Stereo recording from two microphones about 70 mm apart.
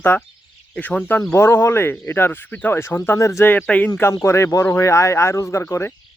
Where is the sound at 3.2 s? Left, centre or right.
Left.